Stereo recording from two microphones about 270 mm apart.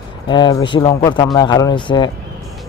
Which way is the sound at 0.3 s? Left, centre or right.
Centre.